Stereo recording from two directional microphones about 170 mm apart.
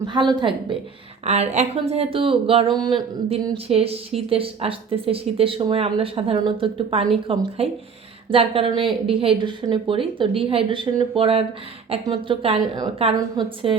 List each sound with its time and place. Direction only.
0.0 s a woman's voice: 25° right (ahead or behind)
1.2 s a woman's voice: 40° right (ahead or behind)